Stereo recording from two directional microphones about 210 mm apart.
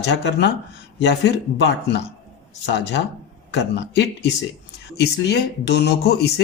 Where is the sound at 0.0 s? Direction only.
55° left (ahead or behind).